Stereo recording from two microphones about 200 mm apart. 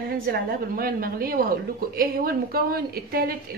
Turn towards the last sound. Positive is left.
turn(degrees=-45)  # may be behind; listen again after turning